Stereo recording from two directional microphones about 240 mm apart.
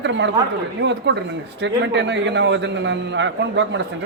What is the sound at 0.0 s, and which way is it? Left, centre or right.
A man's voice, right.